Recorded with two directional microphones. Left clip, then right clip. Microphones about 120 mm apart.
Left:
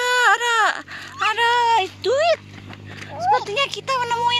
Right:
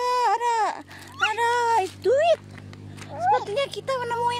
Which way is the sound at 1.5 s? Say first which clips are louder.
Left 4 dB; 50° right (ahead or behind).